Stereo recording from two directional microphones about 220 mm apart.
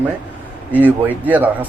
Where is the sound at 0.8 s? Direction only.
5° right (ahead or behind).